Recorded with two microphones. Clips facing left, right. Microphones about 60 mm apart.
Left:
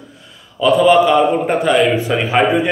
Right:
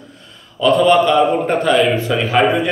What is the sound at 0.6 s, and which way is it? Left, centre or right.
A man's voice, centre.